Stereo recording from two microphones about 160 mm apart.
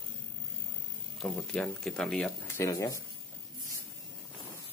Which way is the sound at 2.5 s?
20° left (ahead or behind).